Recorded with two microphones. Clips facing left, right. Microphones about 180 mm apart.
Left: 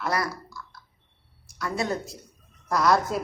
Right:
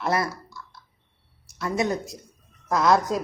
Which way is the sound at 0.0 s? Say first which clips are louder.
Right 3 dB; 25° right (ahead or behind).